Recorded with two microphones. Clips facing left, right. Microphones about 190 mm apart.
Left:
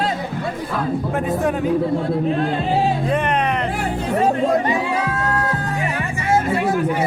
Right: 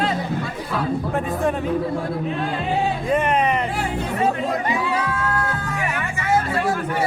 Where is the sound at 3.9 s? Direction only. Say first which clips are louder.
Left 4 dB; 40° left (ahead or behind).